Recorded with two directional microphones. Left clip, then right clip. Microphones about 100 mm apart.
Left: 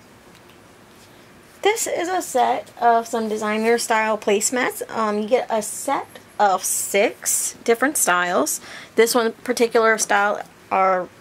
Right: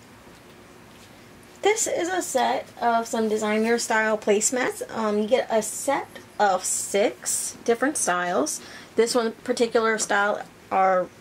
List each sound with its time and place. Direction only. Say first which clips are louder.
1.6 s a woman's voice: left 2 dB; 35° left (ahead or behind)